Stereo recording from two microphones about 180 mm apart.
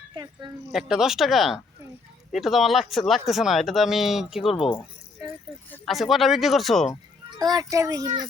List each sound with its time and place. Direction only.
0.7 s speech: centre (ahead or behind)
5.7 s speech: centre (ahead or behind)
7.3 s a child's voice: 20° right (ahead or behind)